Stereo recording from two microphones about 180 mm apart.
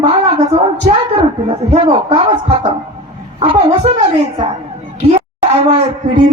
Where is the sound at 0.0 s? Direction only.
30° right (ahead or behind).